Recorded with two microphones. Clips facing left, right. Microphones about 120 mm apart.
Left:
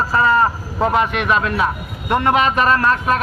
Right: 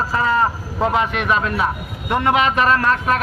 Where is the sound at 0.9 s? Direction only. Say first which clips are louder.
Left 2 dB; 60° left (ahead or behind); by 1.7 s 85° left.